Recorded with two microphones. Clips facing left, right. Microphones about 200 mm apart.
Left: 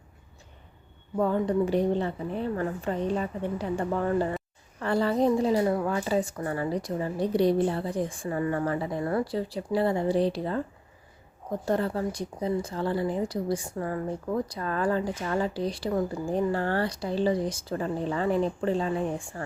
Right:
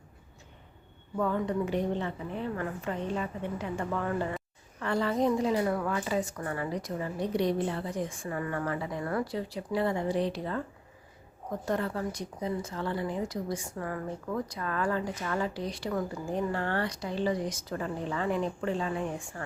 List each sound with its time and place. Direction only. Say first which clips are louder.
1.1 s speech: left 4 dB; 30° left (ahead or behind)
11.6 s speech: left 4 dB; 30° left (ahead or behind)